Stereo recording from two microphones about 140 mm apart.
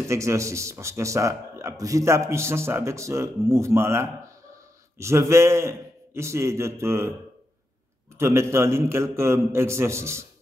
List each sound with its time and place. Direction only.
0.1 s a man's voice: 20° right (ahead or behind)
8.2 s a man's voice: 20° right (ahead or behind)